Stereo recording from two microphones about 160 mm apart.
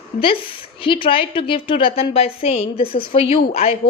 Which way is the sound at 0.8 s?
35° left (ahead or behind).